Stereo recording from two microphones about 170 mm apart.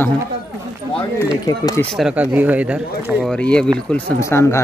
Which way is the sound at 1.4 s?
20° left (ahead or behind).